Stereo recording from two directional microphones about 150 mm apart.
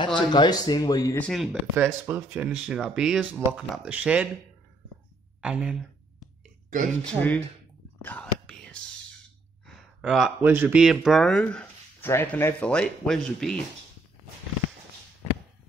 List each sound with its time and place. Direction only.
0.0 s speech: 30° left (ahead or behind)
1.2 s speech: centre (ahead or behind)
5.4 s a sound: 5° right (ahead or behind)
7.1 s speech: 5° left (ahead or behind)
8.0 s whispering: 10° left (ahead or behind)
9.7 s a sound: 5° right (ahead or behind)
10.5 s speech: 10° right (ahead or behind)